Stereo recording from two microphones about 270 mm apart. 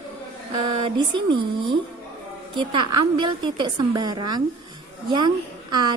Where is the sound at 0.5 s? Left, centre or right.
Right.